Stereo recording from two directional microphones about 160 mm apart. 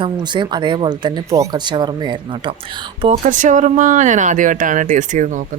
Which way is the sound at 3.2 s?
50° right (ahead or behind).